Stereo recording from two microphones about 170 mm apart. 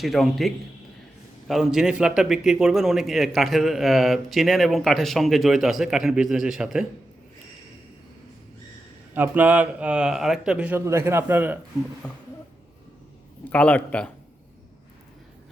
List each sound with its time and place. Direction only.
0.0 s a man's voice: centre (ahead or behind)
9.1 s speech: 10° right (ahead or behind)
12.0 s a man's voice: 5° left (ahead or behind)
13.4 s a man's voice: 10° left (ahead or behind)